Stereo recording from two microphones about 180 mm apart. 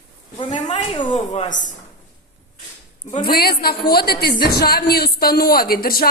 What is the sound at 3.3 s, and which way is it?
A woman's voice, 60° left (ahead or behind).